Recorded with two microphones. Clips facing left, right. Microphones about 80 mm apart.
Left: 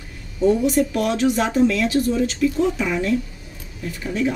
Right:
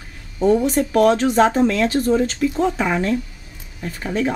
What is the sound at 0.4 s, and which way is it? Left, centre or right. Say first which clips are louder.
A woman's voice: right 1 dB; right.